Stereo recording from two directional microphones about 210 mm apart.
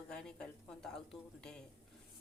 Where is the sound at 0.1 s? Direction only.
5° left (ahead or behind).